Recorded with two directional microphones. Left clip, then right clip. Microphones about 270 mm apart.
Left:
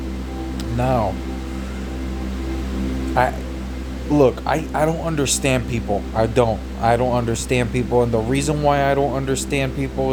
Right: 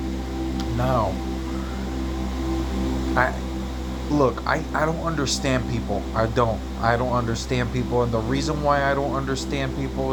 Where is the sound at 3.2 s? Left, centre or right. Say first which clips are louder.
Left 4 dB; centre.